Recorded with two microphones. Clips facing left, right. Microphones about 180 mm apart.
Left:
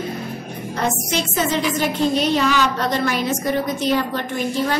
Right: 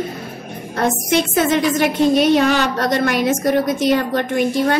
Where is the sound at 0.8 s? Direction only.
50° right (ahead or behind).